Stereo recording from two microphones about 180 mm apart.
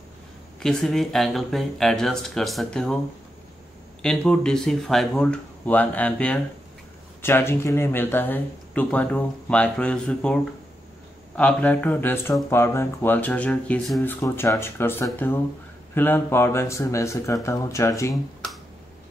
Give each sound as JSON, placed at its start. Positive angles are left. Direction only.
{"t": 0.6, "sound": "speech", "side_deg": 0}
{"t": 4.0, "sound": "speech", "side_deg": 5}
{"t": 14.0, "sound": "speech", "side_deg": 15}